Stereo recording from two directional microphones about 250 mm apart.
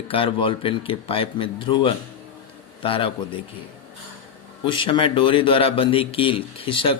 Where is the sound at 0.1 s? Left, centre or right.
Left.